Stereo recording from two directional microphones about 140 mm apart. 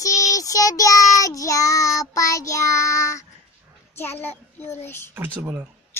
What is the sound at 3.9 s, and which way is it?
Speech, 15° left (ahead or behind).